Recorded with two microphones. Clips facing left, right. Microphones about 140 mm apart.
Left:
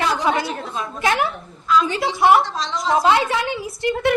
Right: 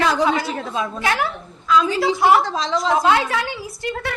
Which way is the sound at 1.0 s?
20° left (ahead or behind).